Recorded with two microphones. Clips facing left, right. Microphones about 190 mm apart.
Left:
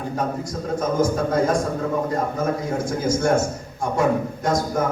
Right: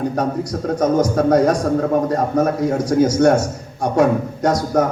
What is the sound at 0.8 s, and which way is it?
Speech, 70° right (ahead or behind).